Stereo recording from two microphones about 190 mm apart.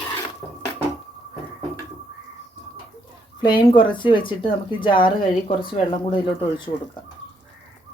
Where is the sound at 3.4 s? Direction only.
25° left (ahead or behind).